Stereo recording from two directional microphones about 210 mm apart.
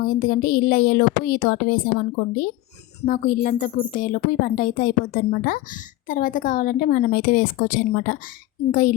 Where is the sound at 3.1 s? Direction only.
40° left (ahead or behind).